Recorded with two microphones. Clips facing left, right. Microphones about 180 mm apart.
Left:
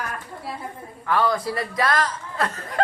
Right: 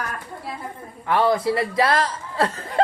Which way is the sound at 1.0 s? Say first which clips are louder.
Right 3 dB; 25° right (ahead or behind).